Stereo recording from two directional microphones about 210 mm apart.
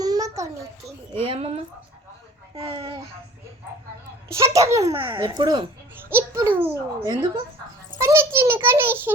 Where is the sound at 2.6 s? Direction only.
30° right (ahead or behind).